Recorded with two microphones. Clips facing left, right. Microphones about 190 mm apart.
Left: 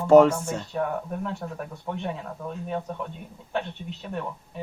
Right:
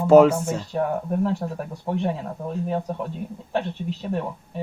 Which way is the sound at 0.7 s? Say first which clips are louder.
Right 6 dB; 35° right (ahead or behind).